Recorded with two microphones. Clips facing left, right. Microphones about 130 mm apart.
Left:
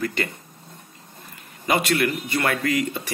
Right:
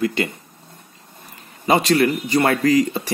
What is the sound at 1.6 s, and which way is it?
Speech, 30° right (ahead or behind).